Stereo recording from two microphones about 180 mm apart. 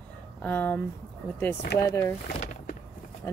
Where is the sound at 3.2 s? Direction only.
15° left (ahead or behind).